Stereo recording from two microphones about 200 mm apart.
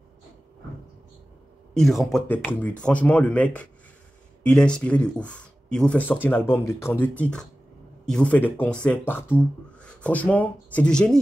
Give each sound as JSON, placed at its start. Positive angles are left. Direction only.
{"t": 1.7, "sound": "speech", "side_deg": 0}